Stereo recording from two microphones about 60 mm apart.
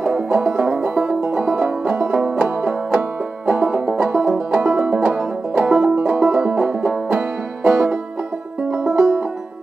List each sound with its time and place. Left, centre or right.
0.0 s banjo: centre
5.6 s music: centre
6.3 s banjo: centre
8.7 s music: right